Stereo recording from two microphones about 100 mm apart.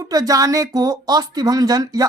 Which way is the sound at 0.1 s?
35° right (ahead or behind).